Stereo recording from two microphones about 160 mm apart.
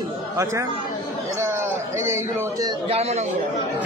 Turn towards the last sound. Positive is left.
turn(degrees=-40)  # may be behind; listen again after turning